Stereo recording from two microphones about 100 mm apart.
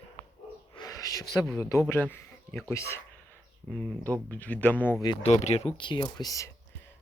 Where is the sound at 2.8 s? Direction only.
30° left (ahead or behind).